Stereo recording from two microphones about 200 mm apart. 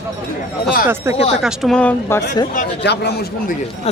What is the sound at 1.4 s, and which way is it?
Speech, centre (ahead or behind).